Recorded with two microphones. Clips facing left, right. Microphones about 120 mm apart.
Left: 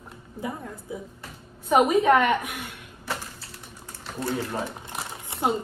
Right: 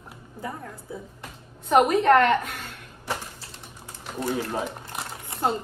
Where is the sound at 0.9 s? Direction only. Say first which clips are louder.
Left 2 dB; 15° left (ahead or behind).